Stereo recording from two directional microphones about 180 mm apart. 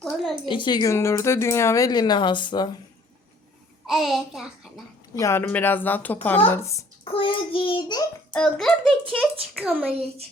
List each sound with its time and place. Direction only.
0.0 s a child's voice: centre (ahead or behind)
0.4 s speech: 25° left (ahead or behind)
3.8 s a child's voice: centre (ahead or behind)
5.1 s speech: 15° left (ahead or behind)
7.0 s speech: 30° left (ahead or behind)
8.3 s a child's voice: 5° left (ahead or behind)